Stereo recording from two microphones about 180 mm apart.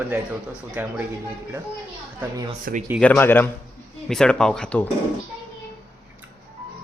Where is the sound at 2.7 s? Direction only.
55° right (ahead or behind).